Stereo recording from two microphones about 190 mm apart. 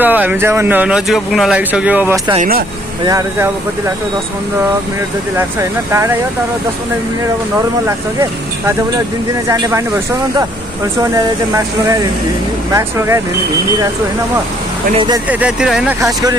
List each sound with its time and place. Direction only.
0.0 s speech: 10° right (ahead or behind)
5.6 s speech: 15° right (ahead or behind)
8.2 s speech: 15° right (ahead or behind)
12.7 s speech: 15° right (ahead or behind)
15.2 s speech: 5° right (ahead or behind)